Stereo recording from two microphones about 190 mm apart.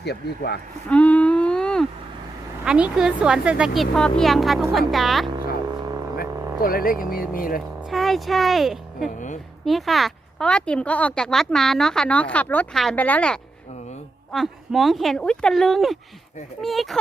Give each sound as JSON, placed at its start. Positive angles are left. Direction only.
{"t": 0.0, "sound": "speech", "side_deg": 60}
{"t": 0.9, "sound": "a sound", "side_deg": 5}
{"t": 2.6, "sound": "speech", "side_deg": -5}
{"t": 6.1, "sound": "speech", "side_deg": 50}
{"t": 7.9, "sound": "speech", "side_deg": 0}
{"t": 9.0, "sound": "a woman's voice", "side_deg": 40}
{"t": 9.6, "sound": "speech", "side_deg": 0}